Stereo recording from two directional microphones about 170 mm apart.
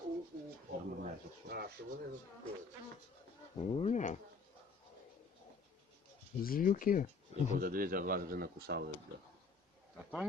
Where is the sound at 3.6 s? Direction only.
35° left (ahead or behind).